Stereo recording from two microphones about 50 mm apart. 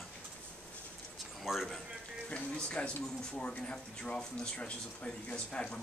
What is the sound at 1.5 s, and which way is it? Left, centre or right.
Speech, centre.